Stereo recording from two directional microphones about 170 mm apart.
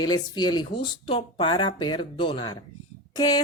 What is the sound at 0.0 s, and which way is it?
Speech, 25° left (ahead or behind).